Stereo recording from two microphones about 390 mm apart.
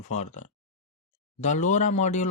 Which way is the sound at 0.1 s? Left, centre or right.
Centre.